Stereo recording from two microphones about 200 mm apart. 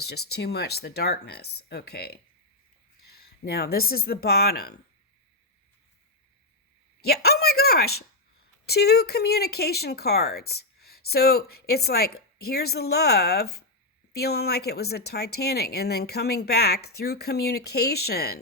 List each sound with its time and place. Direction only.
0.1 s speech: 55° left (ahead or behind)
7.0 s a woman's voice: 50° left (ahead or behind)